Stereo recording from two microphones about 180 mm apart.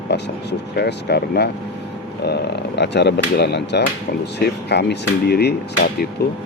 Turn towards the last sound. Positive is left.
turn(degrees=60)  # may be behind; listen again after turning